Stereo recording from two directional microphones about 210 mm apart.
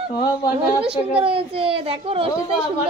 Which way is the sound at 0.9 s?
25° right (ahead or behind).